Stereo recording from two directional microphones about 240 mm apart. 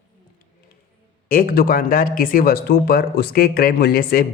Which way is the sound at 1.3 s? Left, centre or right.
Left.